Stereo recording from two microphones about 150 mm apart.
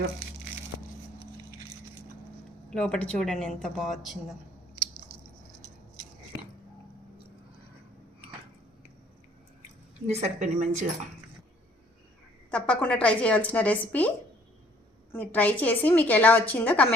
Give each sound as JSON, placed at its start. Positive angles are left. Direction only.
{"t": 2.6, "sound": "a woman's voice", "side_deg": 5}
{"t": 10.1, "sound": "speech", "side_deg": -50}
{"t": 12.5, "sound": "a woman's voice", "side_deg": 5}
{"t": 15.1, "sound": "a woman's voice", "side_deg": 10}